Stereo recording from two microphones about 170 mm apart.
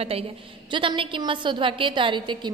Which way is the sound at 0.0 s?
35° right (ahead or behind).